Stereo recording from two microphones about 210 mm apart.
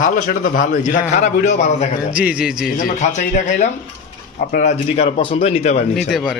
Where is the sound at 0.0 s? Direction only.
40° left (ahead or behind).